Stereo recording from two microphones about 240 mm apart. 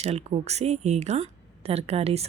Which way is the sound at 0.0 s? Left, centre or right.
Right.